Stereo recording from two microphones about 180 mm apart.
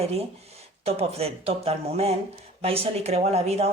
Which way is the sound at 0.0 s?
35° right (ahead or behind).